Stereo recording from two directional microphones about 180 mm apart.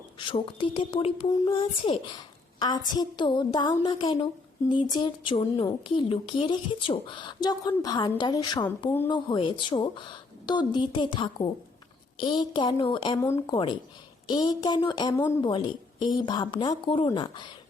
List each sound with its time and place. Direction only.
0.3 s a child's voice: 30° left (ahead or behind)